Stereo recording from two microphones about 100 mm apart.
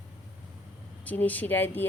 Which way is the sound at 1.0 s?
15° left (ahead or behind).